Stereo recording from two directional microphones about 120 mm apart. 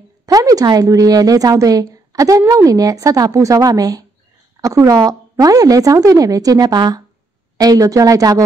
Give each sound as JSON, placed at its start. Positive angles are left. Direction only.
{"t": 0.3, "sound": "a woman's voice", "side_deg": -30}